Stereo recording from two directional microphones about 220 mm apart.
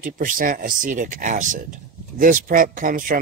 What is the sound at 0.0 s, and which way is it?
Speech, 40° right (ahead or behind).